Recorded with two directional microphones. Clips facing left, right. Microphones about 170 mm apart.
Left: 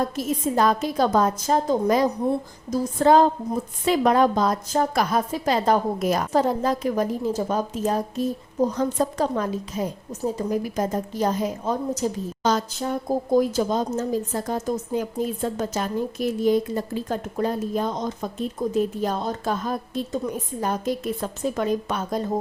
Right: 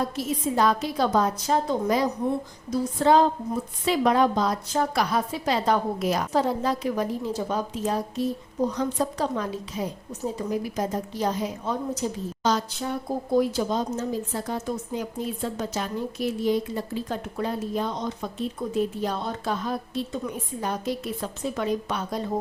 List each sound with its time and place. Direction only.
0.2 s a woman's voice: 45° left (ahead or behind)